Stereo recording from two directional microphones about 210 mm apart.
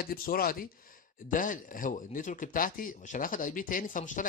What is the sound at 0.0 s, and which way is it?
Speech, 45° left (ahead or behind).